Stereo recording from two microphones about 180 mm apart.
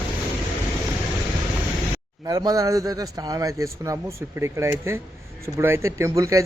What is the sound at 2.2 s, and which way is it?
A man's voice, 20° right (ahead or behind).